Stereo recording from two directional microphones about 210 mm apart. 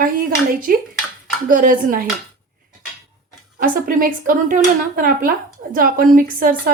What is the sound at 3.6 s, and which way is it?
Speech, 40° right (ahead or behind).